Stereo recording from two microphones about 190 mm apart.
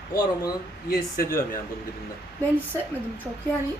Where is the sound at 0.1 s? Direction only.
20° left (ahead or behind).